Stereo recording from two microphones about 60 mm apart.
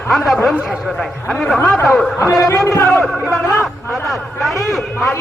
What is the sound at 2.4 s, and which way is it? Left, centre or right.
Speech, left.